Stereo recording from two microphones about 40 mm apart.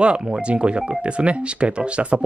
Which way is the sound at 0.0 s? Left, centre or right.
Right.